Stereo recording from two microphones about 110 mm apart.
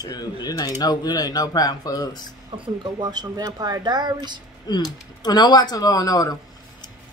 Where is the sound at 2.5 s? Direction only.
55° right (ahead or behind).